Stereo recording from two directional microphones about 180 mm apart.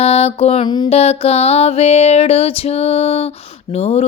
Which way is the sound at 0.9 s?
35° left (ahead or behind).